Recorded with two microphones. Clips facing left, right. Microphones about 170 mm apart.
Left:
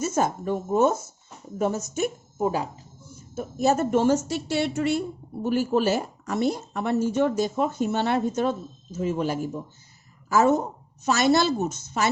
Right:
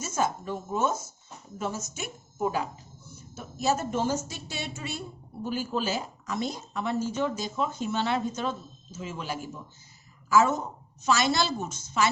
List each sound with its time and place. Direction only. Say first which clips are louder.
0.0 s a woman's voice: left 5 dB; 55° left (ahead or behind)
2.4 s speech: left 3 dB; 35° left (ahead or behind)
3.3 s a woman's voice: left 6 dB; 55° left (ahead or behind)